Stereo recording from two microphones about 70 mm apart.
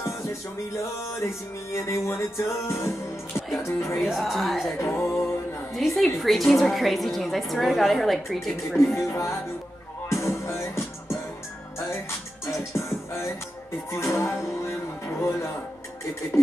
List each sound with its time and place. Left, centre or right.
1.2 s music: left
4.0 s a woman's voice: centre
4.7 s music: left
5.8 s a woman's voice: centre
9.0 s music: left
12.4 s music: left
13.9 s speech: left